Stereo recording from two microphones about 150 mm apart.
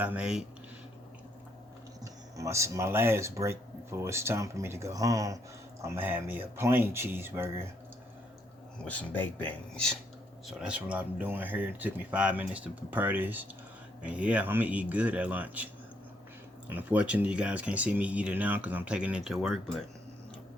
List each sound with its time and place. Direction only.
0.0 s speech: 10° right (ahead or behind)
2.3 s speech: 20° right (ahead or behind)
8.8 s speech: 10° left (ahead or behind)
10.4 s speech: 5° right (ahead or behind)